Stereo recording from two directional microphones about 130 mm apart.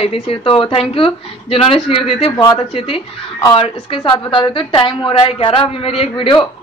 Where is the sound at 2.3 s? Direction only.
30° left (ahead or behind).